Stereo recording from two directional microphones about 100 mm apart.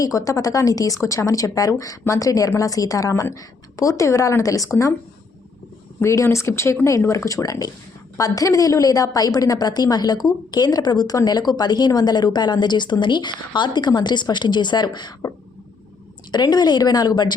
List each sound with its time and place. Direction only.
0.0 s speech: 35° left (ahead or behind)
6.0 s speech: 25° left (ahead or behind); by 15.1 s 45° left (ahead or behind)
16.3 s speech: 45° left (ahead or behind)